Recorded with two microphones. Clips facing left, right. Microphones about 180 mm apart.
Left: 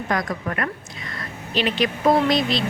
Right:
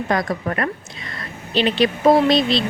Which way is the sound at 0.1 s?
30° right (ahead or behind).